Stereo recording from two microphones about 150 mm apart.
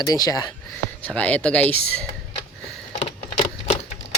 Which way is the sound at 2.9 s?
50° left (ahead or behind).